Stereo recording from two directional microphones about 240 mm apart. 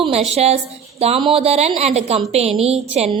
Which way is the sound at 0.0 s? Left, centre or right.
Right.